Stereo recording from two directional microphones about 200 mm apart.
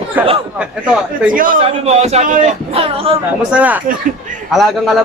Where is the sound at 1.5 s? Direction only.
30° right (ahead or behind).